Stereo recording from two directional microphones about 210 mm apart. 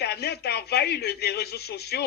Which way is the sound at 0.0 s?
50° left (ahead or behind).